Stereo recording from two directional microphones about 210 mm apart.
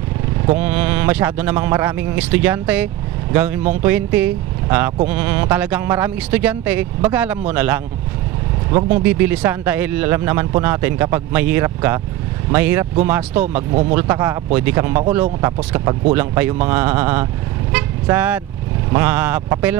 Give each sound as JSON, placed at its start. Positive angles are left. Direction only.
{"t": 0.6, "sound": "speech", "side_deg": -10}
{"t": 8.7, "sound": "speech", "side_deg": -35}
{"t": 9.0, "sound": "speech", "side_deg": -10}
{"t": 13.6, "sound": "speech", "side_deg": -30}
{"t": 13.9, "sound": "speech", "side_deg": -10}
{"t": 17.7, "sound": "vehicle", "side_deg": -10}
{"t": 18.9, "sound": "speech", "side_deg": -10}